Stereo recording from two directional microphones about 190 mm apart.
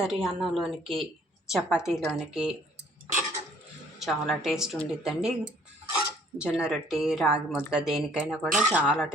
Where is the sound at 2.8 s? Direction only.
60° right (ahead or behind).